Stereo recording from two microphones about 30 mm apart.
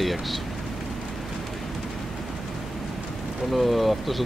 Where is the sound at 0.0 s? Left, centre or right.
Centre.